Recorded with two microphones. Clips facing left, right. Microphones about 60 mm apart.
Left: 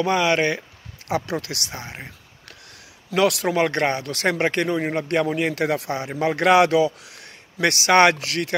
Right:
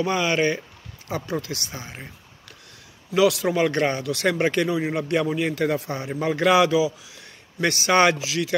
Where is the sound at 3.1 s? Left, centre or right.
Left.